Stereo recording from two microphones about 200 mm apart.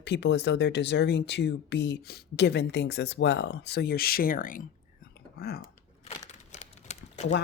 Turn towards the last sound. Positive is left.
turn(degrees=35)  # may be behind; listen again after turning